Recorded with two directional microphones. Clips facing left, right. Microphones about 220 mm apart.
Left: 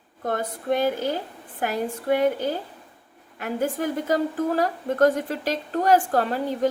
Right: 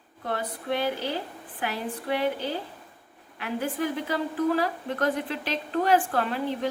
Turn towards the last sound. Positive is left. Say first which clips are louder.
# left 4 dB
turn(degrees=40)  # may be behind; listen again after turning